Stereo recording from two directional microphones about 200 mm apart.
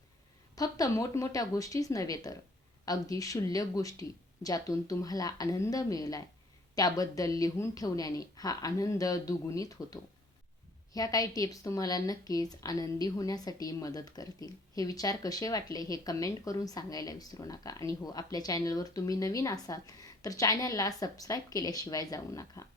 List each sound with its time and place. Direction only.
0.5 s speech: 20° left (ahead or behind)